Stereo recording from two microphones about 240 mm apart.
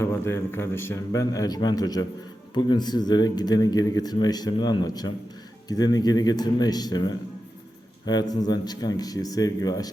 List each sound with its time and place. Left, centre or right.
0.0 s speech: centre